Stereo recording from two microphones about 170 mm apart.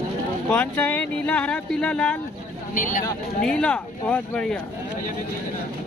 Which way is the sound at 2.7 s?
50° left (ahead or behind).